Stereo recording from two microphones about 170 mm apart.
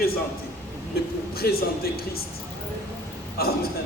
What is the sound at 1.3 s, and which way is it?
Speech, 65° left (ahead or behind).